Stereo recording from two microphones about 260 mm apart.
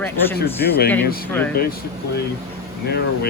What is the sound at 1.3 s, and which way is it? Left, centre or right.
Speech, centre.